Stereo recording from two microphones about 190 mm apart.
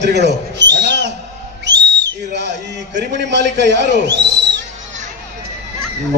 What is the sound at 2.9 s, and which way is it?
A man's voice, 65° right (ahead or behind).